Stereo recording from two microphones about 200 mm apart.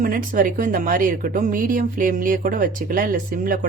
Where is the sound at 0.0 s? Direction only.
45° right (ahead or behind).